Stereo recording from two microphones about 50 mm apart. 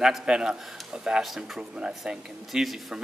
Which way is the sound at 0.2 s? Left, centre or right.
Centre.